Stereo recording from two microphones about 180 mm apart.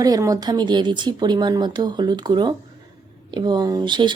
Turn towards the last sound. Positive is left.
turn(degrees=-25)  # may be behind; listen again after turning